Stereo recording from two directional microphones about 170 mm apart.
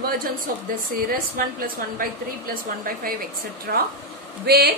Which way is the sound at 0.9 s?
55° right (ahead or behind).